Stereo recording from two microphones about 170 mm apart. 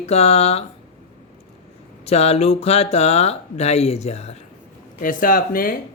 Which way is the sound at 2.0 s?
40° left (ahead or behind).